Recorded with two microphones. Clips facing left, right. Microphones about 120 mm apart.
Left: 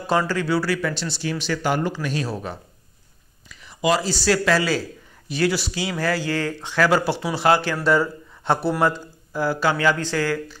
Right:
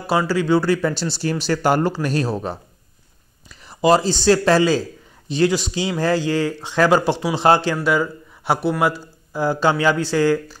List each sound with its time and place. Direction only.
0.3 s speech: 20° right (ahead or behind); by 2.2 s 40° right (ahead or behind)
2.2 s speech: 25° right (ahead or behind)
7.8 s speech: 5° right (ahead or behind)
9.3 s speech: 20° right (ahead or behind)